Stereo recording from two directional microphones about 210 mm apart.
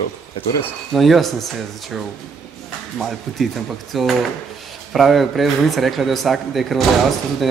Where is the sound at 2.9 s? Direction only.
Centre (ahead or behind).